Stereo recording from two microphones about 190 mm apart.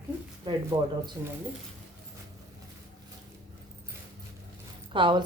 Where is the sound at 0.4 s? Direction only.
20° right (ahead or behind).